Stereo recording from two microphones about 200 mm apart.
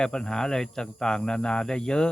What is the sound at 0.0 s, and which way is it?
Speech, 5° left (ahead or behind).